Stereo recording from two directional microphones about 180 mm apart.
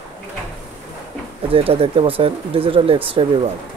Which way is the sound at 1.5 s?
30° right (ahead or behind).